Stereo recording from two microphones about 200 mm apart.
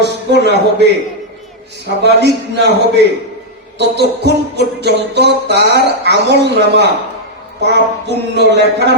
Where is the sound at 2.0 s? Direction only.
55° right (ahead or behind).